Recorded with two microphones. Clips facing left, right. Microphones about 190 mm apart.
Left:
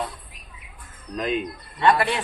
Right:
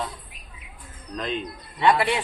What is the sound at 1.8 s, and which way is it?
Speech, 15° right (ahead or behind).